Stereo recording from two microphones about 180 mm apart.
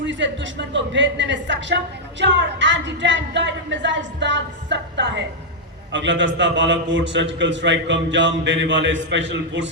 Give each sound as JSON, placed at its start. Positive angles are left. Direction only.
{"t": 0.0, "sound": "speech", "side_deg": -85}
{"t": 5.9, "sound": "speech", "side_deg": -90}